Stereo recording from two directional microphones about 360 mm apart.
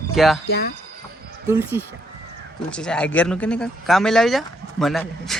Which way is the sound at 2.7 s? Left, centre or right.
Centre.